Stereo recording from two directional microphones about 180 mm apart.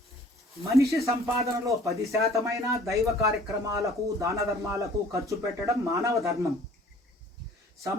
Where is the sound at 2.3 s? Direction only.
15° right (ahead or behind).